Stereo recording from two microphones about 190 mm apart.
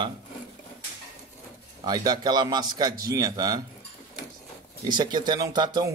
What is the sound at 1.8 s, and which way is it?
Speech, 20° right (ahead or behind).